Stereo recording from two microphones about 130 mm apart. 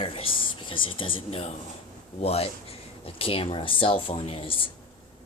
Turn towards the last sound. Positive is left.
turn(degrees=45)  # may be behind; listen again after turning